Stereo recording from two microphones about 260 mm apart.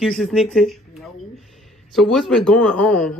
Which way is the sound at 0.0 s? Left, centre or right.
Centre.